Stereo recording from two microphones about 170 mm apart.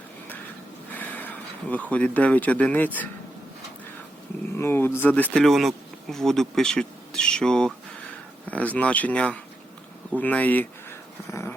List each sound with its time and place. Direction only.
0.9 s speech: 10° left (ahead or behind)
4.5 s speech: 15° left (ahead or behind)
11.3 s dog: 15° left (ahead or behind)